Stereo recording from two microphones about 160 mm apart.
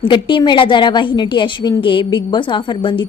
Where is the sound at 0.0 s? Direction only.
30° left (ahead or behind).